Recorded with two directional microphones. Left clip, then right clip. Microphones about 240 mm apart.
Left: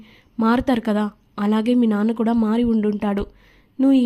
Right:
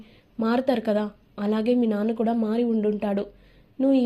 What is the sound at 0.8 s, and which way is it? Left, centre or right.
Speech, left.